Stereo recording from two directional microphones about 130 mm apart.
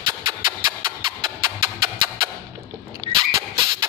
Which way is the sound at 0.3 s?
35° right (ahead or behind).